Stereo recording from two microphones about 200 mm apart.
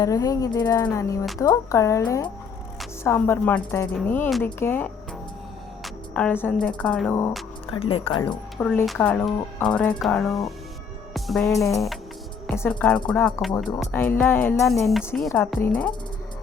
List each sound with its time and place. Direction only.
0.0 s speech: 15° left (ahead or behind)
4.3 s speech: centre (ahead or behind)
4.6 s speech: 10° left (ahead or behind)
7.7 s speech: 25° left (ahead or behind)
8.5 s speech: 10° left (ahead or behind)